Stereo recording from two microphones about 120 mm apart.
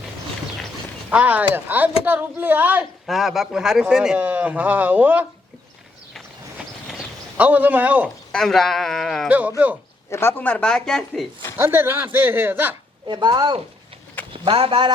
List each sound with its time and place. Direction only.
1.1 s speech: 15° right (ahead or behind)
3.1 s speech: centre (ahead or behind)
7.3 s speech: 15° right (ahead or behind)
8.3 s speech: 5° left (ahead or behind)
10.1 s speech: 20° left (ahead or behind); by 11.3 s 5° left (ahead or behind)
11.5 s speech: 20° right (ahead or behind)
13.1 s speech: 40° right (ahead or behind)